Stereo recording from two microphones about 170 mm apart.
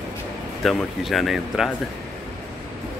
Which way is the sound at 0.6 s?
Centre (ahead or behind).